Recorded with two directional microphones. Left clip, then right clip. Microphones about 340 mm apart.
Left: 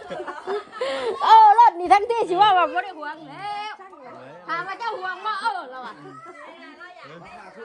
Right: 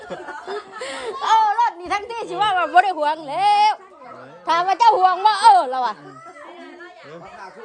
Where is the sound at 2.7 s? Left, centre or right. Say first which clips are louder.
Right 12 dB; centre.